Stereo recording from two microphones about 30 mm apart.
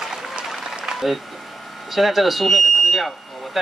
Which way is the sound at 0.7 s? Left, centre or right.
Right.